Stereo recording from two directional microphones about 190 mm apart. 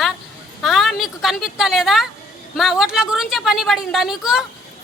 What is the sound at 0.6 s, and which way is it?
A woman's voice, centre (ahead or behind).